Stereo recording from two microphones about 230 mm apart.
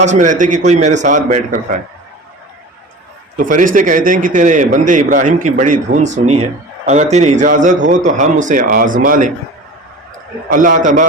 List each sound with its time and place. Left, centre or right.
0.0 s a man's voice: right
3.3 s a man's voice: right
10.5 s a man's voice: right